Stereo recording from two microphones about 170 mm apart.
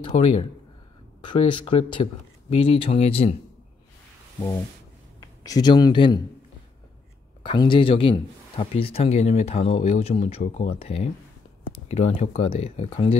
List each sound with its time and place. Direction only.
0.1 s speech: 40° left (ahead or behind)
1.2 s speech: 30° left (ahead or behind)
5.2 s speech: 20° left (ahead or behind)
7.4 s speech: 30° left (ahead or behind)